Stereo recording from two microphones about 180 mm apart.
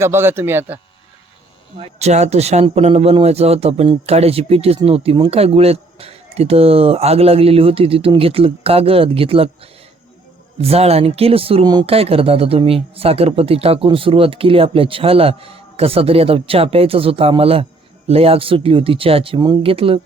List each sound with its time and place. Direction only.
0.0 s a man's voice: 15° right (ahead or behind)
1.8 s speech: 35° right (ahead or behind)
10.6 s speech: 35° right (ahead or behind)